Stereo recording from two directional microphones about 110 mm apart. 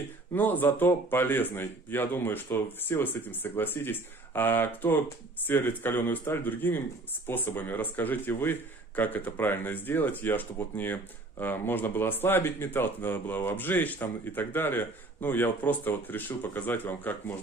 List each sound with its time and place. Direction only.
0.3 s a man's voice: 15° left (ahead or behind)